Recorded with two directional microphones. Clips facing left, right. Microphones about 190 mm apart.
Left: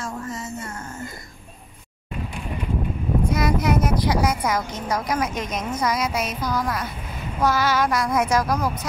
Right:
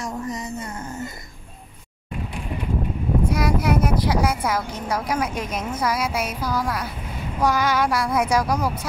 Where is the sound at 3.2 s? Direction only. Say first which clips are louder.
Left 1 dB; 10° right (ahead or behind).